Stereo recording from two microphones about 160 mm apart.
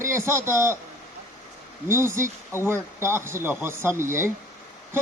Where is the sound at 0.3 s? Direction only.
15° right (ahead or behind).